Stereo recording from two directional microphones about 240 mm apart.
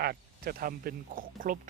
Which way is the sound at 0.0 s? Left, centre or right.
Right.